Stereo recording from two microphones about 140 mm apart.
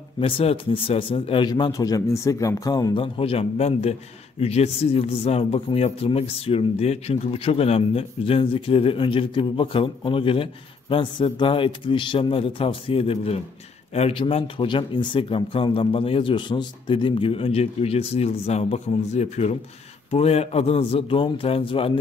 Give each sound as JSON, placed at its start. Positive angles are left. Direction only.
{"t": 0.2, "sound": "speech", "side_deg": 40}
{"t": 1.5, "sound": "a man's voice", "side_deg": 25}